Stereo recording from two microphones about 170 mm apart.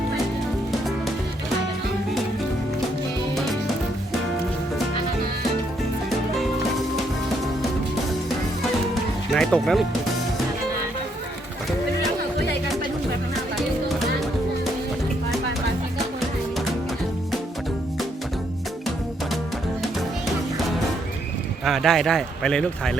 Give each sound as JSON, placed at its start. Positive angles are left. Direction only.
{"t": 0.7, "sound": "music", "side_deg": 0}
{"t": 9.3, "sound": "music", "side_deg": 5}
{"t": 21.6, "sound": "speech", "side_deg": 0}